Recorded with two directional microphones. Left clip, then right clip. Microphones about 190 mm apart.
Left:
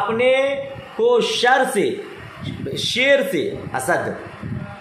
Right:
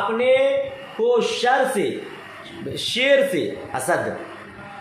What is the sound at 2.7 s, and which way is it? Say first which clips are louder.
A woman's voice: left 1 dB; 20° left (ahead or behind).